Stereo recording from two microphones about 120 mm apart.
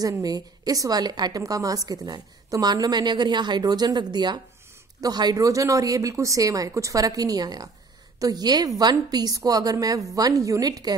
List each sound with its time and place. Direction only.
0.0 s a woman's voice: 30° right (ahead or behind)